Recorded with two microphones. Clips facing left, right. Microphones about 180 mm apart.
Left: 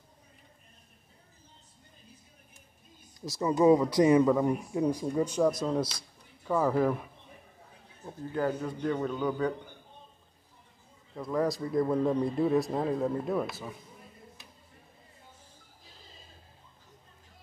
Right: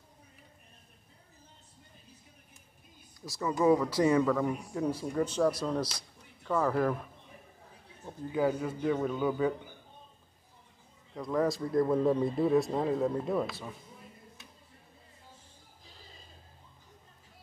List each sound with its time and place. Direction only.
3.3 s a man's voice: 20° left (ahead or behind); by 9.8 s 5° right (ahead or behind)
11.1 s a man's voice: centre (ahead or behind)